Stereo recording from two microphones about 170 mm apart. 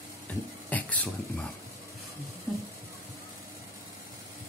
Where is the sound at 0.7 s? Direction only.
10° left (ahead or behind).